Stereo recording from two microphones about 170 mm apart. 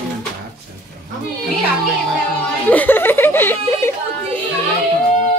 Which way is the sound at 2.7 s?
10° left (ahead or behind).